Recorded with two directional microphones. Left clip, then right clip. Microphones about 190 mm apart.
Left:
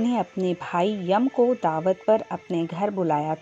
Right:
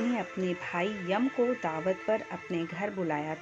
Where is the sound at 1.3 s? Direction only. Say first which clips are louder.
Left 8 dB; 25° left (ahead or behind).